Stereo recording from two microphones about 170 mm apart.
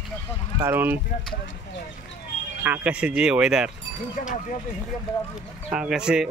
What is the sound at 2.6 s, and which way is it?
Speech, 10° right (ahead or behind).